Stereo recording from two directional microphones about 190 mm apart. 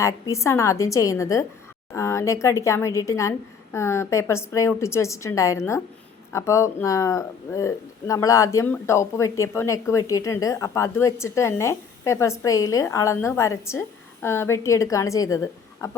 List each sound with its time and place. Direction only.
0.0 s speech: 15° left (ahead or behind)